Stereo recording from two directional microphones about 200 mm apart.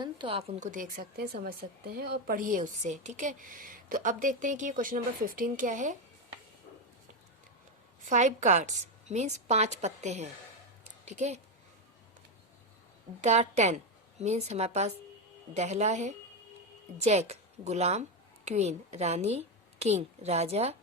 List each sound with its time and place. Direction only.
0.0 s speech: 25° right (ahead or behind)
8.1 s speech: 35° right (ahead or behind)
13.2 s a woman's voice: 35° right (ahead or behind)